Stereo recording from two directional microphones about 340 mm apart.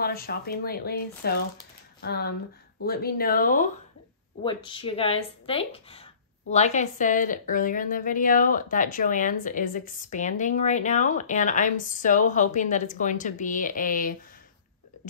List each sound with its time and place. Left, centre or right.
0.0 s a woman's voice: left
4.4 s a woman's voice: centre